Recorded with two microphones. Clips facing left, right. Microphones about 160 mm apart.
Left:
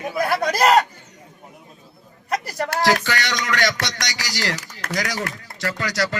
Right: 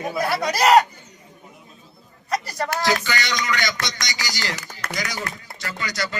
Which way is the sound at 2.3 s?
55° left (ahead or behind).